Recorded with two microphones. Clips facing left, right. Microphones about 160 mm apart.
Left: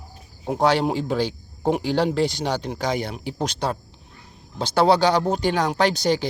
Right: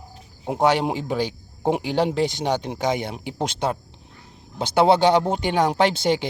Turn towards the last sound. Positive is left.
turn(degrees=-25)  # may be behind; listen again after turning